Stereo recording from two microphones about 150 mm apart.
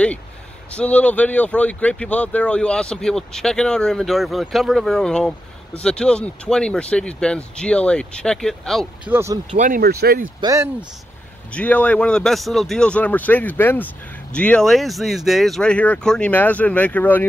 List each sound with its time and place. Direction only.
0.7 s speech: 10° left (ahead or behind)
9.0 s speech: 15° right (ahead or behind)
9.5 s speech: 55° right (ahead or behind)
9.8 s speech: 90° right
10.4 s speech: 20° right (ahead or behind)
11.5 s speech: 10° left (ahead or behind)